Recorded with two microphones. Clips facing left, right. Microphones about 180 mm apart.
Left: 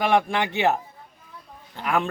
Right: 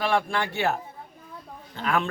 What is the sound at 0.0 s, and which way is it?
A man's voice, 20° left (ahead or behind).